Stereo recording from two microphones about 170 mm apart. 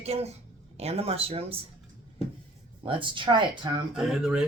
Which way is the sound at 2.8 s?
30° right (ahead or behind).